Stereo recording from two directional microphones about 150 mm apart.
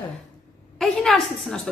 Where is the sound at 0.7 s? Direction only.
5° left (ahead or behind).